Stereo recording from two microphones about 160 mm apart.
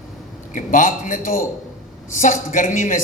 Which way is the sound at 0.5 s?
55° left (ahead or behind).